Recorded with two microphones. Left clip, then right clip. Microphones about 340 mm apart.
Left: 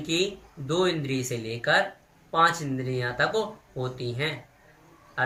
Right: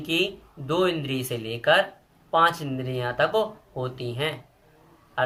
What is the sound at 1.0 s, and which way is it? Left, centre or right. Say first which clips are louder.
Speech: right 1 dB; right.